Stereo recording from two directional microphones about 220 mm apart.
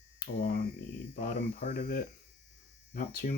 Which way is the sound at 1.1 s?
40° left (ahead or behind).